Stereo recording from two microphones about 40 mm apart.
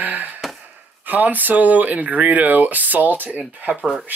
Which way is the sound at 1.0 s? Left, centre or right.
Right.